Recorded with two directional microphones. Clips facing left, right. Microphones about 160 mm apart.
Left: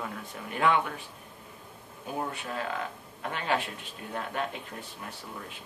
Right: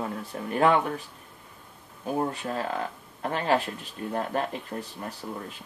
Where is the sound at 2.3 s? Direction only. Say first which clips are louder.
Right 4 dB; 35° right (ahead or behind).